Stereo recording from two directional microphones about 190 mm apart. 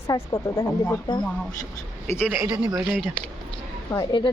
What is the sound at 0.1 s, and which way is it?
Speech, 20° left (ahead or behind).